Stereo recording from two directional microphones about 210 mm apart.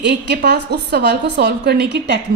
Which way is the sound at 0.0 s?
55° right (ahead or behind).